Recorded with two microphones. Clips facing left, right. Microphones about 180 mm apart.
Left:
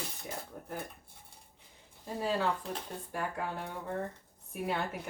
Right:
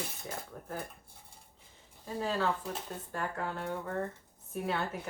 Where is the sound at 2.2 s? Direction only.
15° left (ahead or behind).